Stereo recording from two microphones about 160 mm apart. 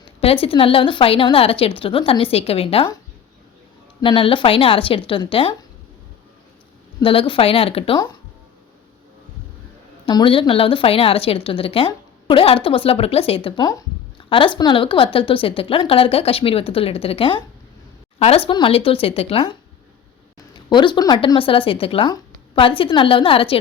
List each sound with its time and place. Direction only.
0.2 s speech: 35° left (ahead or behind)
4.0 s speech: 35° left (ahead or behind)
7.0 s speech: 35° left (ahead or behind)
10.1 s speech: 30° left (ahead or behind)
20.7 s speech: 30° left (ahead or behind)